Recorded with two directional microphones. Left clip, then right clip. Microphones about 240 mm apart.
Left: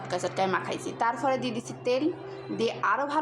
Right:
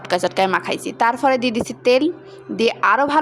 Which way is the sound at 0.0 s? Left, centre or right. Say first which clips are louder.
Right 10 dB; right.